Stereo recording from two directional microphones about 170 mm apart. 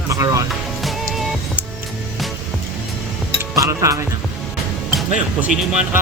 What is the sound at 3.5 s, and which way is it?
Speech, 20° right (ahead or behind).